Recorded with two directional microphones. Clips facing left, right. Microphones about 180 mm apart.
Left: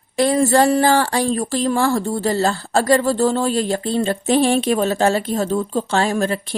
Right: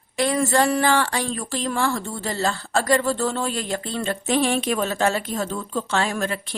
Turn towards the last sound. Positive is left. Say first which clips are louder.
# left 6 dB
turn(degrees=35)  # may be behind; listen again after turning